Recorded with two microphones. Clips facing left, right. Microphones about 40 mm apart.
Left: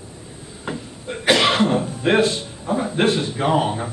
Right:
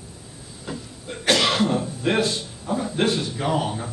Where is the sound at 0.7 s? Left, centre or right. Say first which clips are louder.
Left 4 dB; left.